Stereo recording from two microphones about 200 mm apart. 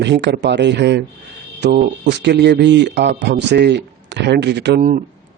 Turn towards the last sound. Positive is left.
turn(degrees=-50)  # may be behind; listen again after turning